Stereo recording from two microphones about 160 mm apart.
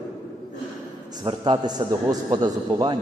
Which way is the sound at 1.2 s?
30° right (ahead or behind).